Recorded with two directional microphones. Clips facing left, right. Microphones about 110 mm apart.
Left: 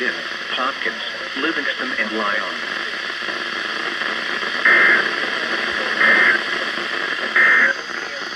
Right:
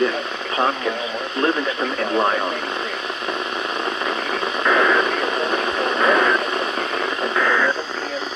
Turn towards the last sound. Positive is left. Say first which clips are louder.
# even
turn(degrees=-40)  # may be behind; listen again after turning